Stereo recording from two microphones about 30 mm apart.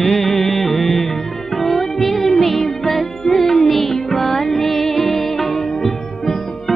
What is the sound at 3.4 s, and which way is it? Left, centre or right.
Music, left.